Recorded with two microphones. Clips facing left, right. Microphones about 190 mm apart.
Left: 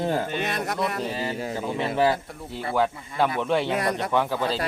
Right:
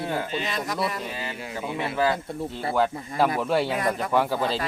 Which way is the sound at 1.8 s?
25° left (ahead or behind).